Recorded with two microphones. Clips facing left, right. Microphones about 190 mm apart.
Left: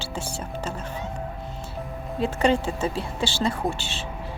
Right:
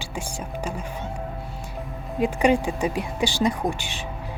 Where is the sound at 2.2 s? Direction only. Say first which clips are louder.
Right 2 dB; 15° right (ahead or behind).